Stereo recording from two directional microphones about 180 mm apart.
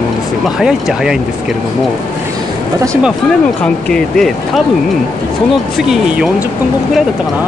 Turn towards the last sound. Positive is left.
turn(degrees=-5)  # may be behind; listen again after turning